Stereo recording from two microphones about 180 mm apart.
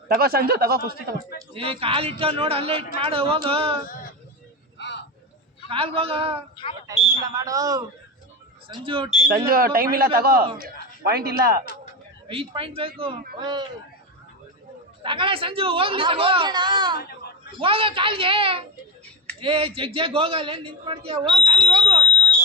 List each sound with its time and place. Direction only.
0.1 s speech: 60° right (ahead or behind)
1.5 s a man's voice: 30° right (ahead or behind)
4.8 s a sound: 75° left (ahead or behind)
5.6 s a man's voice: 30° right (ahead or behind)
7.3 s a man's voice: 20° right (ahead or behind)
8.7 s a man's voice: 30° right (ahead or behind)
9.3 s speech: 55° right (ahead or behind)
12.3 s a man's voice: 30° right (ahead or behind)
15.0 s a man's voice: 30° right (ahead or behind)